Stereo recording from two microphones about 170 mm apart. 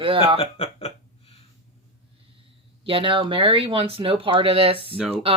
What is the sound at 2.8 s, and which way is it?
Speech, 30° right (ahead or behind).